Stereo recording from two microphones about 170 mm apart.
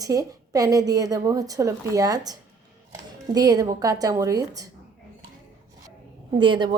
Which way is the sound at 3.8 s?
20° right (ahead or behind).